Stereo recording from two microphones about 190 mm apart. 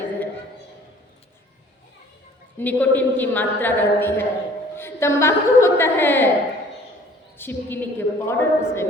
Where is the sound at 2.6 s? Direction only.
10° left (ahead or behind).